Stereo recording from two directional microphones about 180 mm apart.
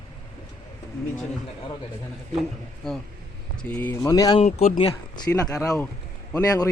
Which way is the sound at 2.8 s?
5° left (ahead or behind).